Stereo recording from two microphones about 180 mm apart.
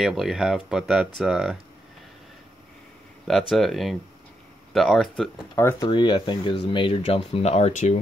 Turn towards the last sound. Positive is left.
turn(degrees=40)  # may be behind; listen again after turning